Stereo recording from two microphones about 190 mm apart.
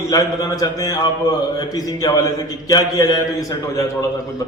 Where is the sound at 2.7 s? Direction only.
20° left (ahead or behind).